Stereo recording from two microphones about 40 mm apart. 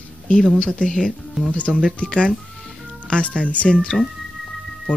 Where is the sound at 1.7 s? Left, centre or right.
Centre.